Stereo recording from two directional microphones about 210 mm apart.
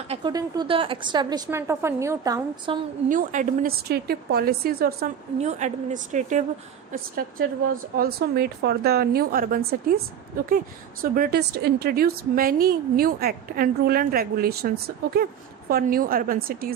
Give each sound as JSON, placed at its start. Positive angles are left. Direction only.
{"t": 0.1, "sound": "a woman's voice", "side_deg": -20}
{"t": 3.1, "sound": "a woman's voice", "side_deg": -40}
{"t": 5.4, "sound": "a woman's voice", "side_deg": -35}
{"t": 11.0, "sound": "a woman's voice", "side_deg": -45}
{"t": 15.7, "sound": "a woman's voice", "side_deg": -45}